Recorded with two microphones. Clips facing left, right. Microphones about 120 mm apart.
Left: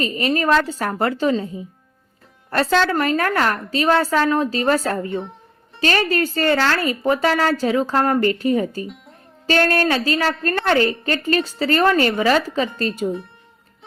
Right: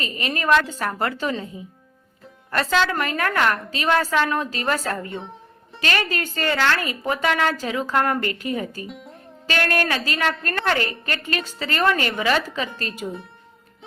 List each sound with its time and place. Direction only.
0.0 s speech: 40° left (ahead or behind)
5.1 s music: centre (ahead or behind)
5.8 s speech: 35° left (ahead or behind)
8.9 s music: centre (ahead or behind)
9.5 s speech: 30° left (ahead or behind)